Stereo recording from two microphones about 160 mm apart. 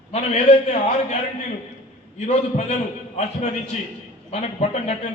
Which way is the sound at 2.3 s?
45° left (ahead or behind).